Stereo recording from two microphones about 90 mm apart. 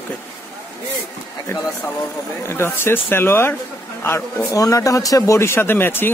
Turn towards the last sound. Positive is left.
turn(degrees=25)  # may be behind; listen again after turning